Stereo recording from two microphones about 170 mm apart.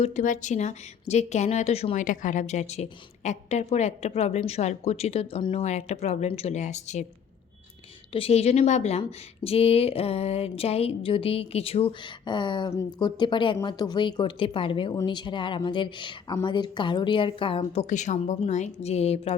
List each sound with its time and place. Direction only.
0.0 s a woman's voice: 45° left (ahead or behind)
8.1 s a woman's voice: 35° left (ahead or behind)
17.8 s a woman's voice: 45° left (ahead or behind)